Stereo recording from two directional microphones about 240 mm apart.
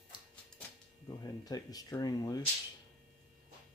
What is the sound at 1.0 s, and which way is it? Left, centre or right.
Speech, centre.